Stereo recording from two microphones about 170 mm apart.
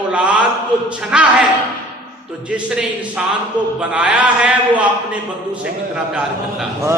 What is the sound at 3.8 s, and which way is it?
A man's voice, 5° right (ahead or behind).